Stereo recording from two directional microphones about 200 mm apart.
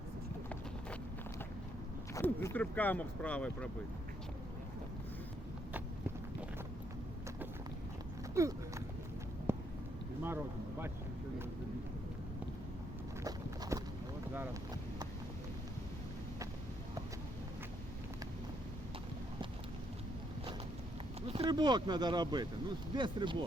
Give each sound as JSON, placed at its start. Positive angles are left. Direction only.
{"t": 2.1, "sound": "speech", "side_deg": 10}
{"t": 8.4, "sound": "horse", "side_deg": -15}
{"t": 9.5, "sound": "a sound", "side_deg": -10}
{"t": 10.2, "sound": "speech", "side_deg": -10}
{"t": 13.2, "sound": "clip-clop", "side_deg": -20}
{"t": 21.3, "sound": "speech", "side_deg": -25}